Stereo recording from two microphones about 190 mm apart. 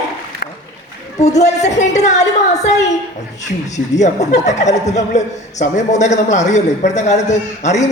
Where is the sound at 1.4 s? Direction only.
35° left (ahead or behind).